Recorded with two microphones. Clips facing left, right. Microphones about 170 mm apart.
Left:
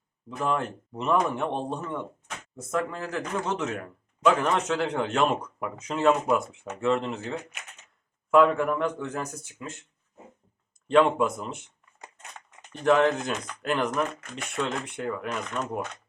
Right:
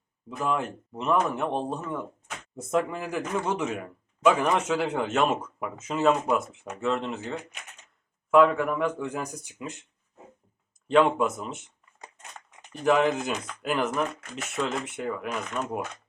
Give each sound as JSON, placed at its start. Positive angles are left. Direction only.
{"t": 0.3, "sound": "a man's voice", "side_deg": -5}
{"t": 8.3, "sound": "a man's voice", "side_deg": 0}
{"t": 10.8, "sound": "a man's voice", "side_deg": 0}